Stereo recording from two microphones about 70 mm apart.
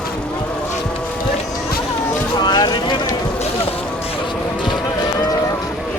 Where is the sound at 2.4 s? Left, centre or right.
Left.